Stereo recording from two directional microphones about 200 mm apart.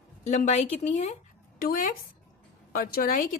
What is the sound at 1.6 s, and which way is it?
Speech, 45° left (ahead or behind).